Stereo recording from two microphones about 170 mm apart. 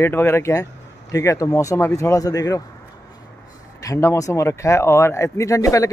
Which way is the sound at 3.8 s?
20° left (ahead or behind).